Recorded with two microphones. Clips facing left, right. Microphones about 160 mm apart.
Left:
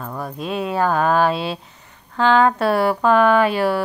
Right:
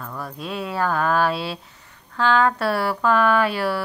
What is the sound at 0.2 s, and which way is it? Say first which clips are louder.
Speech: left 5 dB; 20° left (ahead or behind).